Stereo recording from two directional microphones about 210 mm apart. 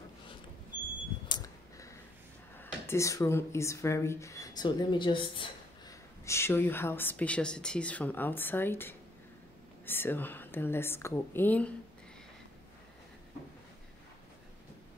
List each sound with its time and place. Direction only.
1.3 s a sound: 15° left (ahead or behind)
2.6 s speech: 15° left (ahead or behind)
6.2 s a woman's voice: 10° left (ahead or behind)